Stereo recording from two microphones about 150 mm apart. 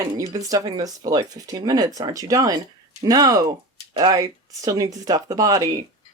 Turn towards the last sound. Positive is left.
turn(degrees=-25)  # may be behind; listen again after turning